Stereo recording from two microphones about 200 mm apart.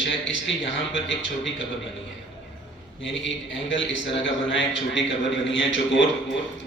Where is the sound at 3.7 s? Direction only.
65° left (ahead or behind).